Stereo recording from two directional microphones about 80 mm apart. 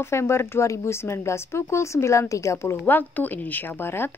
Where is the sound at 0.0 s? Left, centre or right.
Left.